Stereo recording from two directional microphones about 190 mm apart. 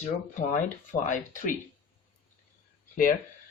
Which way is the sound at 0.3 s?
40° left (ahead or behind).